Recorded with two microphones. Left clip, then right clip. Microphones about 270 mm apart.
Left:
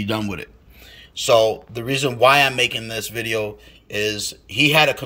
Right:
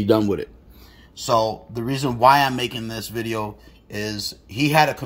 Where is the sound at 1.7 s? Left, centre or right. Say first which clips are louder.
Left 3 dB; centre.